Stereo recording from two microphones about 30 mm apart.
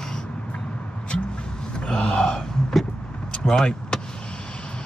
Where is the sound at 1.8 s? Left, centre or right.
Left.